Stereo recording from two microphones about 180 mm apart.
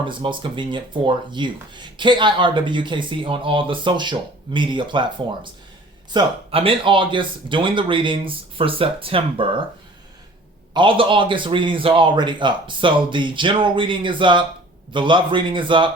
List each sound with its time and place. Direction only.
0.0 s speech: 25° right (ahead or behind)
10.8 s speech: 30° right (ahead or behind)